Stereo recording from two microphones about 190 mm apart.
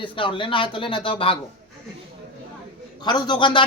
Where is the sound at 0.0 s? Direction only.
25° left (ahead or behind).